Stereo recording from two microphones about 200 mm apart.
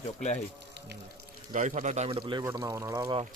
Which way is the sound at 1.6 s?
40° right (ahead or behind).